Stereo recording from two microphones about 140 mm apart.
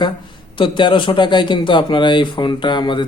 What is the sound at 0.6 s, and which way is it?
Speech, 35° left (ahead or behind).